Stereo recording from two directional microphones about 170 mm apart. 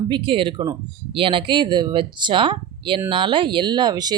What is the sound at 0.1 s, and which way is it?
Speech, 30° right (ahead or behind).